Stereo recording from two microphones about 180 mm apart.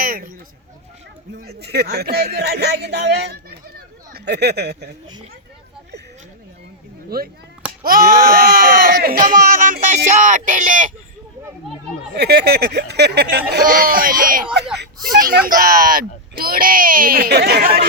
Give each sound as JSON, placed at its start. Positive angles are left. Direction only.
{"t": 0.0, "sound": "a sound", "side_deg": -55}
{"t": 1.4, "sound": "speech", "side_deg": -65}
{"t": 3.8, "sound": "a sound", "side_deg": -60}
{"t": 7.1, "sound": "speech", "side_deg": -60}
{"t": 12.1, "sound": "speech", "side_deg": -65}
{"t": 14.8, "sound": "speech", "side_deg": -65}